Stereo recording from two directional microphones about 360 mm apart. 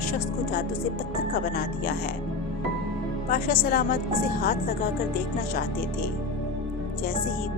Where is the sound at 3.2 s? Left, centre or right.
Left.